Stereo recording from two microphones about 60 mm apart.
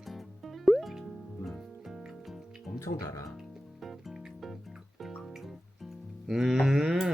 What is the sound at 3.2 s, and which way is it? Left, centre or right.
Music, centre.